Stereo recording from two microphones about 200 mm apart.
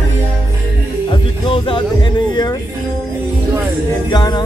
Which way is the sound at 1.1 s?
25° left (ahead or behind).